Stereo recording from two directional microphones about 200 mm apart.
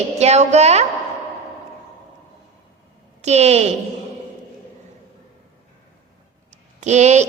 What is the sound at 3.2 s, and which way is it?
Speech, 35° right (ahead or behind).